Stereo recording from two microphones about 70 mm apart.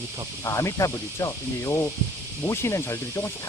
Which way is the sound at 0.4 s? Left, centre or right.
Left.